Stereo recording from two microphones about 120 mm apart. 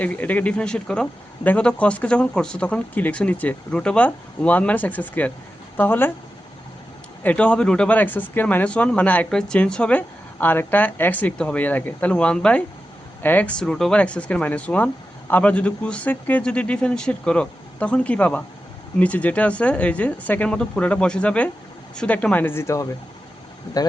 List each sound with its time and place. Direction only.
0.0 s speech: 10° left (ahead or behind)
7.2 s speech: 10° left (ahead or behind); by 23.9 s 30° left (ahead or behind)